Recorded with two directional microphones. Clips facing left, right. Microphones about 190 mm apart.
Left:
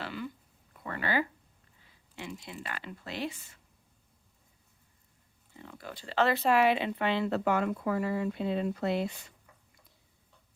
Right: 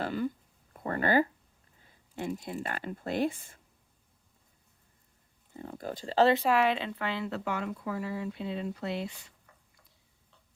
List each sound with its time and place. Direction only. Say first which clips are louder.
0.0 s a sound: right 7 dB; 45° right (ahead or behind)
1.9 s speech: right 7 dB; 45° right (ahead or behind)
5.5 s speech: right 7 dB; 40° right (ahead or behind)
6.5 s a woman's voice: left 1 dB; 5° left (ahead or behind); by 7.3 s 25° left (ahead or behind)
7.3 s speech: left 5 dB; 45° left (ahead or behind)